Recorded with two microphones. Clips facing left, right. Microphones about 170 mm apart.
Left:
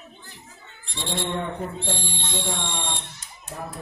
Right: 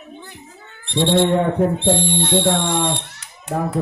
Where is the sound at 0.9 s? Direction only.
90° right.